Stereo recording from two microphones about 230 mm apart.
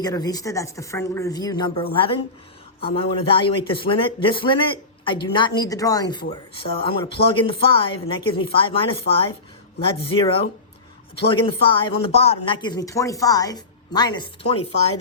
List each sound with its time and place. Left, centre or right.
0.0 s speech: centre